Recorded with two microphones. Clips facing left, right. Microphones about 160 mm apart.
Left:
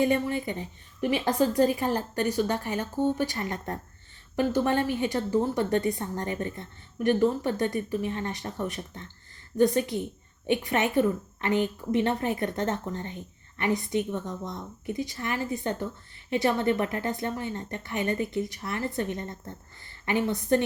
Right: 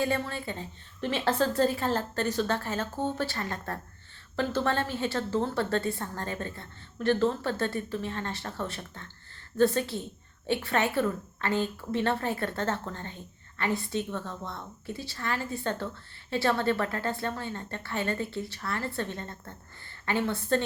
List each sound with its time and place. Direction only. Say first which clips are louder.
0.0 s a woman's voice: left 5 dB; 20° left (ahead or behind)